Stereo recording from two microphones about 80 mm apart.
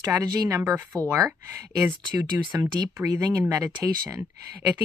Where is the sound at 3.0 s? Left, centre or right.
Right.